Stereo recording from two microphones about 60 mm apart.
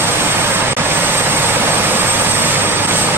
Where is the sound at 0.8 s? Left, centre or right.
Right.